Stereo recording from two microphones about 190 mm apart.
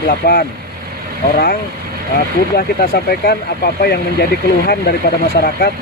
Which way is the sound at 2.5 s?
55° left (ahead or behind).